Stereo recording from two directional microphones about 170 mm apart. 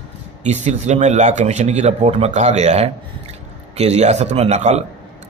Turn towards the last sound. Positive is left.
turn(degrees=-40)  # may be behind; listen again after turning